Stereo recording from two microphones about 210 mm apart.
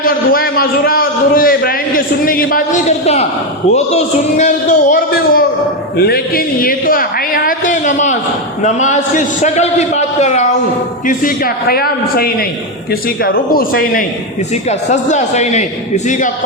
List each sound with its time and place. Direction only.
0.3 s a man's voice: 45° left (ahead or behind)
3.7 s a man's voice: 30° left (ahead or behind)
14.5 s a man's voice: 35° left (ahead or behind)